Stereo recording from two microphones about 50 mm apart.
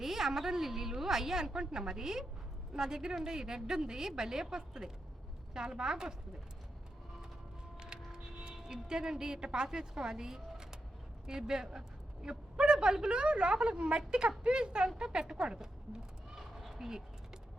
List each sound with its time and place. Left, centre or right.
0.0 s a woman's voice: centre
7.8 s a woman's voice: centre